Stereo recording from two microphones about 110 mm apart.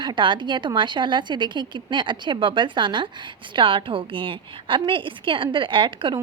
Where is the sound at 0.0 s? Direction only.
45° right (ahead or behind).